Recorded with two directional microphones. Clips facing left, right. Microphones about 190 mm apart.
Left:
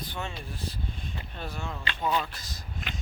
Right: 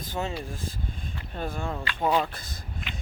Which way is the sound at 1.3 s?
50° right (ahead or behind).